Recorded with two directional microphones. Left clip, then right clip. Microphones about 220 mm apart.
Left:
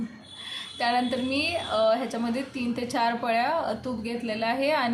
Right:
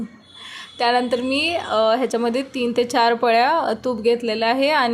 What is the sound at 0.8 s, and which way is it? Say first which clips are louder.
A woman's voice: right 7 dB; 35° right (ahead or behind).